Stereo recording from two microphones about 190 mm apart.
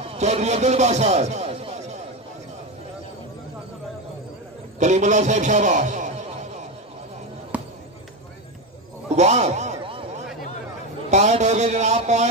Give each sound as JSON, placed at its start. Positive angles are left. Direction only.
{"t": 0.0, "sound": "speech", "side_deg": -35}
{"t": 4.7, "sound": "a man's voice", "side_deg": -40}
{"t": 7.5, "sound": "basketball bounce", "side_deg": -10}
{"t": 9.1, "sound": "a sound", "side_deg": -35}
{"t": 11.1, "sound": "a man's voice", "side_deg": -35}